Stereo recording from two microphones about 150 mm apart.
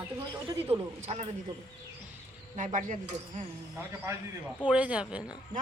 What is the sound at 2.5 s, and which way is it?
Speech, 55° right (ahead or behind).